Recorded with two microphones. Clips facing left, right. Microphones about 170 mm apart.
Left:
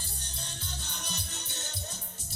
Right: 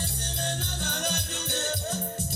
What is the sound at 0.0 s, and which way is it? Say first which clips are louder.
Music: right 12 dB; 70° right (ahead or behind).